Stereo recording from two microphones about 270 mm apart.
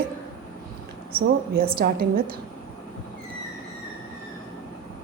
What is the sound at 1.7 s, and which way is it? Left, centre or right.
Speech, right.